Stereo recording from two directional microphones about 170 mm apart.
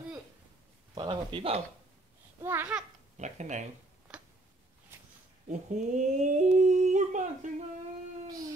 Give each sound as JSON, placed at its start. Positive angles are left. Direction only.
{"t": 0.9, "sound": "speech", "side_deg": -30}
{"t": 2.4, "sound": "speech", "side_deg": -10}
{"t": 3.2, "sound": "humming", "side_deg": -45}
{"t": 5.5, "sound": "humming", "side_deg": -45}